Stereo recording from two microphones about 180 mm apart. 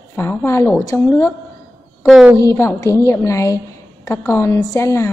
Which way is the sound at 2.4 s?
15° left (ahead or behind).